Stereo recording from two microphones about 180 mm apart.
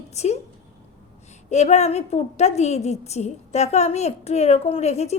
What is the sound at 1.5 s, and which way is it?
A woman's voice, 40° left (ahead or behind).